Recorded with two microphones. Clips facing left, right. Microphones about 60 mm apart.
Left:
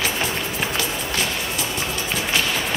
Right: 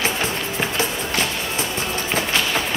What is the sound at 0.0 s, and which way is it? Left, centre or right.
Music, right.